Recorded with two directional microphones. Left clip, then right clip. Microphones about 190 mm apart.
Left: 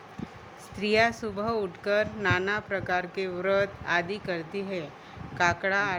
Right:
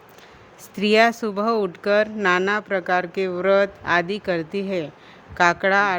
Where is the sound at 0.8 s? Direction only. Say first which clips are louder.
Right 7 dB; 65° right (ahead or behind).